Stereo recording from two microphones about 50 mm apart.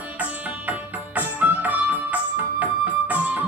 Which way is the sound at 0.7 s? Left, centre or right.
Right.